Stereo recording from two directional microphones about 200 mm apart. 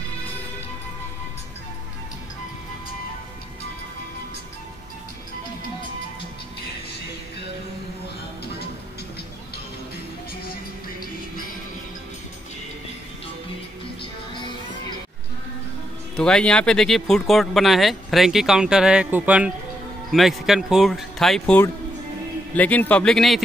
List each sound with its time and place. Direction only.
14.3 s music: 25° left (ahead or behind)
16.2 s speech: 5° left (ahead or behind)